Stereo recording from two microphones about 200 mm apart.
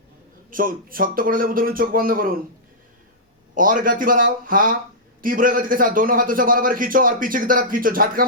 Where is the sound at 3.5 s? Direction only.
40° right (ahead or behind).